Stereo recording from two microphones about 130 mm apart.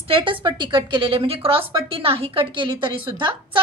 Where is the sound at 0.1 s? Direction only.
40° right (ahead or behind).